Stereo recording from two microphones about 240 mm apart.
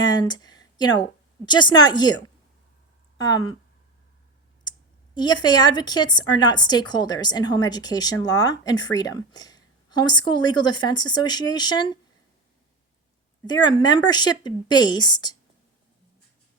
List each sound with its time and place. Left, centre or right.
0.0 s a sound: centre
1.5 s a woman's voice: centre
5.1 s a woman's voice: centre
13.5 s a woman's voice: centre